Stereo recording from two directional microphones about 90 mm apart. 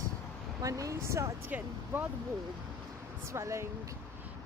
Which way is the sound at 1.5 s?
20° right (ahead or behind).